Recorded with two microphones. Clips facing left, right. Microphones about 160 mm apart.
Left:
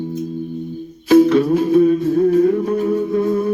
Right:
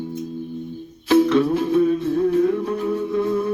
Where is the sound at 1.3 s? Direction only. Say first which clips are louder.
Left 4 dB; 45° left (ahead or behind).